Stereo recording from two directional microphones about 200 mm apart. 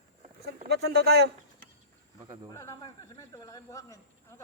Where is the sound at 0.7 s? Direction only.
55° right (ahead or behind).